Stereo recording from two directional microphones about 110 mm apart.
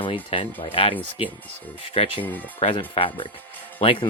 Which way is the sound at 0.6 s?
60° left (ahead or behind).